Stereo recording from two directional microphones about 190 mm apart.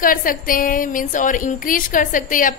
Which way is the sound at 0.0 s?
45° left (ahead or behind).